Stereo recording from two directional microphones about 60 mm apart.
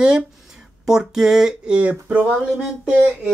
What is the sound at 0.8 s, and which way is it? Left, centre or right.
Speech, centre.